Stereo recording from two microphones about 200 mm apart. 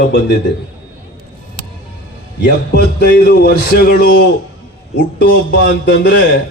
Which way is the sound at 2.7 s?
50° left (ahead or behind).